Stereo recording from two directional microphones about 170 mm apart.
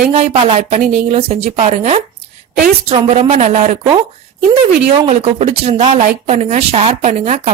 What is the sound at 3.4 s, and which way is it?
Speech, 50° right (ahead or behind).